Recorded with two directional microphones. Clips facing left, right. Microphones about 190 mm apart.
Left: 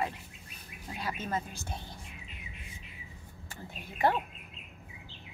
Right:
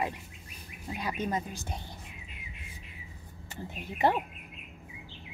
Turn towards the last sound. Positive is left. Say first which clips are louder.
# right 2 dB
turn(degrees=-20)  # may be behind; listen again after turning